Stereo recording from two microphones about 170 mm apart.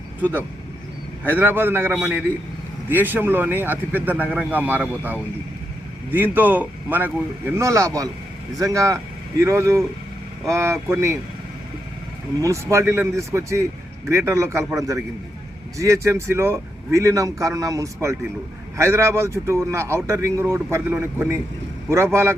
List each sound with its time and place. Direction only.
0.2 s a man's voice: 10° right (ahead or behind)
12.4 s a man's voice: 15° right (ahead or behind)